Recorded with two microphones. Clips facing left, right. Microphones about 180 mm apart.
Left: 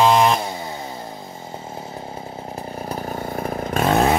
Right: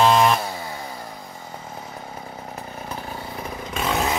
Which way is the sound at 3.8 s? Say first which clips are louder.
Left 6 dB; 55° left (ahead or behind).